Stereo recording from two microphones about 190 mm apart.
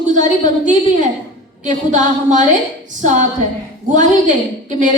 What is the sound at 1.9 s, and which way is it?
A woman's voice, 40° right (ahead or behind).